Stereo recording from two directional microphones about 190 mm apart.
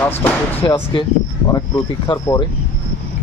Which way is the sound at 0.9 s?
20° left (ahead or behind).